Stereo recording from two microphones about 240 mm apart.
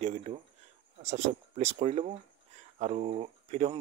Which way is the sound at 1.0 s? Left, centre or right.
Right.